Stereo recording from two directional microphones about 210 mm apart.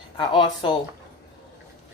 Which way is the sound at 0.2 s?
20° left (ahead or behind).